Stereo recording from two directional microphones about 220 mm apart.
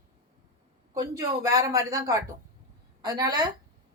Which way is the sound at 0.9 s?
15° right (ahead or behind).